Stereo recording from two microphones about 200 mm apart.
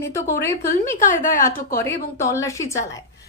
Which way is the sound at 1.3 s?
45° left (ahead or behind).